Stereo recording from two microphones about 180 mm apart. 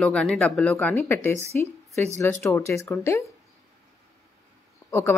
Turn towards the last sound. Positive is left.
turn(degrees=15)  # may be behind; listen again after turning